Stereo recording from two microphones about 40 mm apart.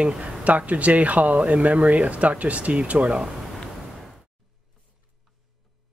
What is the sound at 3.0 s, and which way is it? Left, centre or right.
Speech, right.